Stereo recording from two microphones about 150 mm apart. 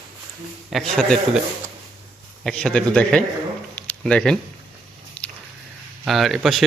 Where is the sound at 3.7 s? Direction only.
5° left (ahead or behind).